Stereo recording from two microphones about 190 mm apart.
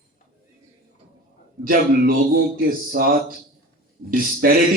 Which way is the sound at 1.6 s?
50° right (ahead or behind).